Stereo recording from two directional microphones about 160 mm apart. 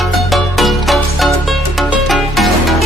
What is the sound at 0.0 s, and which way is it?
Music, centre (ahead or behind).